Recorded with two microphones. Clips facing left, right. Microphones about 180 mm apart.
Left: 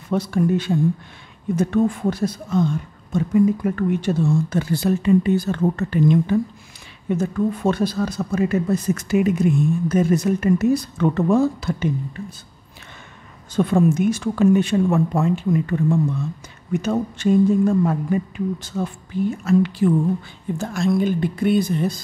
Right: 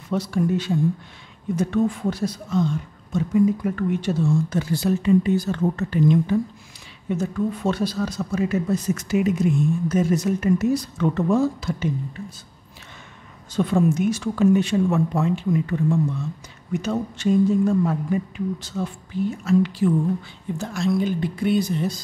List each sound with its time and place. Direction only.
0.1 s speech: 55° left (ahead or behind)
13.6 s speech: 55° left (ahead or behind)